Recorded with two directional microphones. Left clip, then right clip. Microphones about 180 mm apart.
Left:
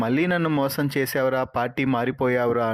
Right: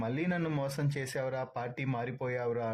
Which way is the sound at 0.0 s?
35° left (ahead or behind).